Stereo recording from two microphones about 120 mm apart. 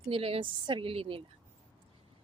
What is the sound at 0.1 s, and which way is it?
A woman's voice, 50° right (ahead or behind).